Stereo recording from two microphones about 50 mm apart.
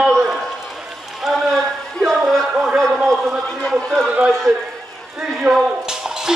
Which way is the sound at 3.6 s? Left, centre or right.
Centre.